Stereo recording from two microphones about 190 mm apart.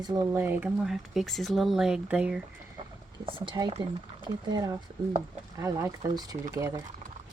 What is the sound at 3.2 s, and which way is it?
A woman's voice, 25° right (ahead or behind).